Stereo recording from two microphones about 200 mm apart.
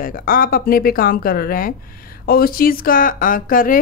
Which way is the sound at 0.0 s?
45° left (ahead or behind).